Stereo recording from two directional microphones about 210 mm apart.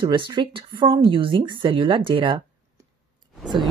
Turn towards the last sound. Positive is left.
turn(degrees=0)  # may be behind; listen again after turning